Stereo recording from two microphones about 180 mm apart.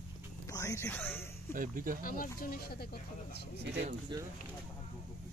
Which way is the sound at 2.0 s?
50° left (ahead or behind).